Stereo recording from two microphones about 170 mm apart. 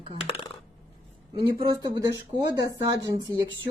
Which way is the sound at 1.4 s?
30° right (ahead or behind).